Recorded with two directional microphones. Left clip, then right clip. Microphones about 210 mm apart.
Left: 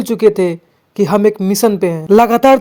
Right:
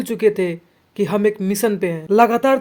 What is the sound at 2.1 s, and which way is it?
Speech, 50° left (ahead or behind).